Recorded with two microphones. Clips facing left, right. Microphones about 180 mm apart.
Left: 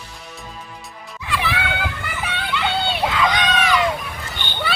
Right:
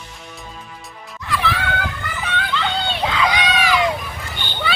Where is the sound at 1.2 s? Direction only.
15° left (ahead or behind).